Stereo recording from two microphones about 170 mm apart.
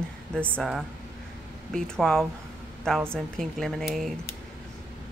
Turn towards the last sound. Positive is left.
turn(degrees=0)  # may be behind; listen again after turning